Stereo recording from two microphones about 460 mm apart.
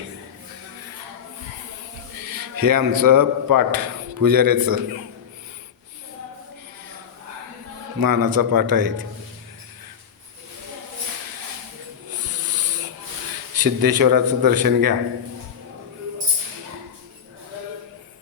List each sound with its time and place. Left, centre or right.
2.1 s a man's voice: right
7.9 s a man's voice: right
12.2 s a sound: right
13.6 s a man's voice: right